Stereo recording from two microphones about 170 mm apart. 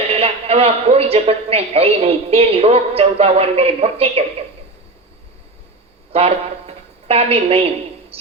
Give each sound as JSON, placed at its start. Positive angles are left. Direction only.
{"t": 0.1, "sound": "a man's voice", "side_deg": -35}
{"t": 6.1, "sound": "a woman's voice", "side_deg": -35}